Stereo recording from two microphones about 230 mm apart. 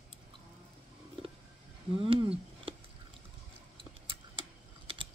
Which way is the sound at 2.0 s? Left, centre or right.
Right.